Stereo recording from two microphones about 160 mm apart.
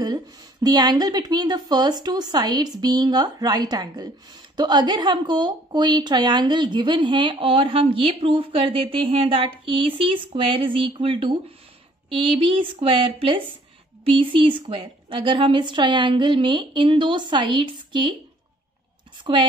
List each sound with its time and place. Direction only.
0.0 s a woman's voice: 25° right (ahead or behind)
19.2 s a woman's voice: 30° right (ahead or behind)